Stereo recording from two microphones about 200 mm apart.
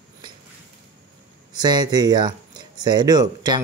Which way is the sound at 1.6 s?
20° right (ahead or behind).